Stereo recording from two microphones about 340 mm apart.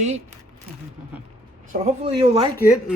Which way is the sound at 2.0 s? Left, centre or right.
Centre.